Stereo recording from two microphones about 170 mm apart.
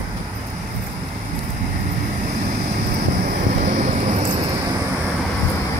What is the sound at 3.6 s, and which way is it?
Vehicle, 40° right (ahead or behind).